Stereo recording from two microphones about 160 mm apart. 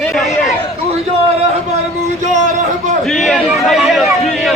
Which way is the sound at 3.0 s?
Centre (ahead or behind).